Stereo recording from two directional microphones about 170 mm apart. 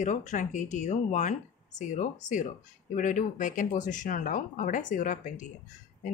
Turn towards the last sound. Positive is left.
turn(degrees=50)  # may be behind; listen again after turning